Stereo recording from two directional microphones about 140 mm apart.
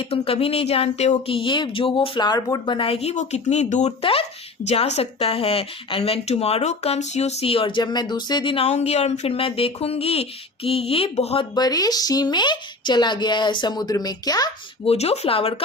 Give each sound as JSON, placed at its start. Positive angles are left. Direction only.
{"t": 0.0, "sound": "speech", "side_deg": 45}
{"t": 4.0, "sound": "speech", "side_deg": 45}
{"t": 11.5, "sound": "speech", "side_deg": 30}
{"t": 14.8, "sound": "speech", "side_deg": 50}